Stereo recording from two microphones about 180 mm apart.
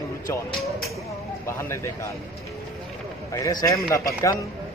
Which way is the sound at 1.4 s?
15° left (ahead or behind).